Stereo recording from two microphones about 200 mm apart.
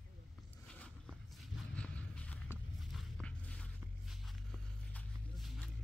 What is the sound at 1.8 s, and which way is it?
Walk, 5° left (ahead or behind).